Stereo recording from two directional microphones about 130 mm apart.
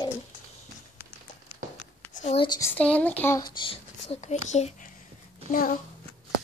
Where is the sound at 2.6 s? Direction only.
10° left (ahead or behind).